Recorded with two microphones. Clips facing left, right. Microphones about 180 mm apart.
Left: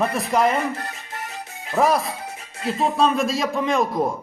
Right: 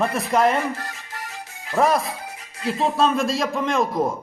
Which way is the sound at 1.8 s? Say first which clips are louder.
Even; centre (ahead or behind).